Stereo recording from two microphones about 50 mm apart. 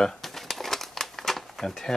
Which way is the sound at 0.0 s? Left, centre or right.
Centre.